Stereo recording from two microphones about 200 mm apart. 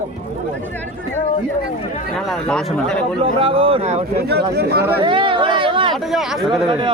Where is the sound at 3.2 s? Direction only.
30° right (ahead or behind).